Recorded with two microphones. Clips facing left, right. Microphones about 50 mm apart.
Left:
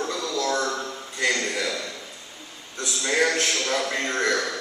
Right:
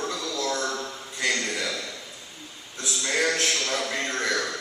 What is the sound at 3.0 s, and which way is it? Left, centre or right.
A man's voice, centre.